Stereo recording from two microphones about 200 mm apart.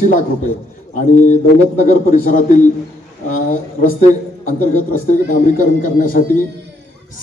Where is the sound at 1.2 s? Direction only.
40° left (ahead or behind).